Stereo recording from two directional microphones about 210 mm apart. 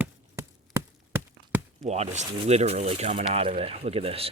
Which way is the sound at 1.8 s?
35° right (ahead or behind).